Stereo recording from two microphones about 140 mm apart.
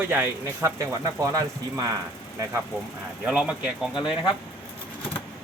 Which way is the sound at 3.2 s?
10° right (ahead or behind).